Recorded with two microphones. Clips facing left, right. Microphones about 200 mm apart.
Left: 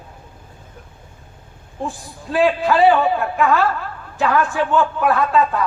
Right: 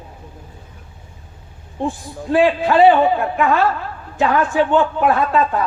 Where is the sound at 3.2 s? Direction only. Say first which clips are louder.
Right 1 dB; 20° right (ahead or behind).